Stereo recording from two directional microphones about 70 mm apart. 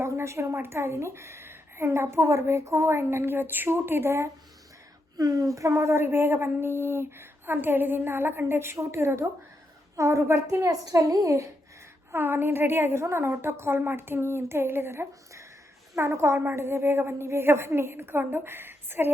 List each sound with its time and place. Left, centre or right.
0.0 s a woman's voice: right
5.1 s a woman's voice: right
10.5 s a woman's voice: right
12.1 s a woman's voice: right